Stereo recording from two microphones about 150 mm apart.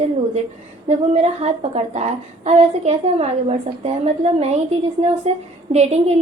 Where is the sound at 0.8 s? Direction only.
45° right (ahead or behind).